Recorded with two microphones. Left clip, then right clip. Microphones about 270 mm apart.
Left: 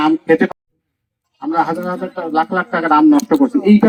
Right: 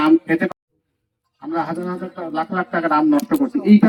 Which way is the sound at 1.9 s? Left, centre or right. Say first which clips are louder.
Left 7 dB; left.